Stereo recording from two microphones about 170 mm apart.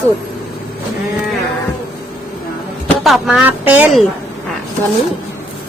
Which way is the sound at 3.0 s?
Centre (ahead or behind).